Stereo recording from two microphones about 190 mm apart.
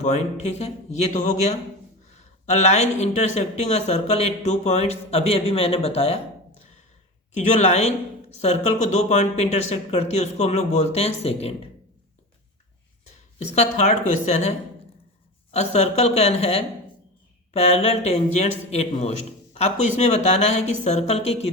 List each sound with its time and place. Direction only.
0.0 s speech: 35° left (ahead or behind)
7.3 s speech: 40° left (ahead or behind)
13.6 s speech: 35° left (ahead or behind)
15.5 s speech: 35° left (ahead or behind)